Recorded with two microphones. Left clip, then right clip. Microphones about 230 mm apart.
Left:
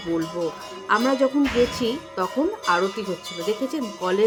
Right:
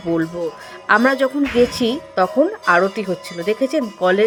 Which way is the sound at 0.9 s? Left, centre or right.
Right.